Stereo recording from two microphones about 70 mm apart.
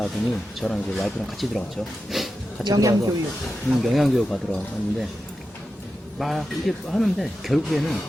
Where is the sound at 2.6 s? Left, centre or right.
Right.